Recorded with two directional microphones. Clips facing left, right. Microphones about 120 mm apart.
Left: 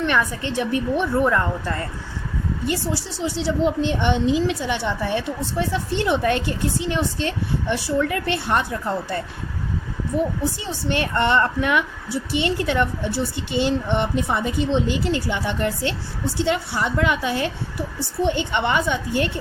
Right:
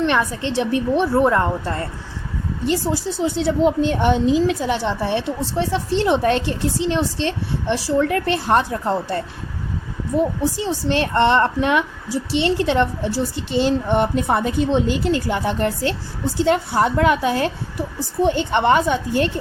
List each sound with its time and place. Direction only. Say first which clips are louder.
0.0 s a woman's voice: right 3 dB; 25° right (ahead or behind)
3.1 s a woman's voice: right 5 dB; 55° right (ahead or behind); by 9.2 s 35° right (ahead or behind)
10.6 s a woman's voice: right 4 dB; 30° right (ahead or behind)